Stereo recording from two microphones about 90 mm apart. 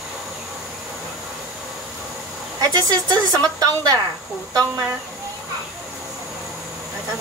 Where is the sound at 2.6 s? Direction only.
45° right (ahead or behind).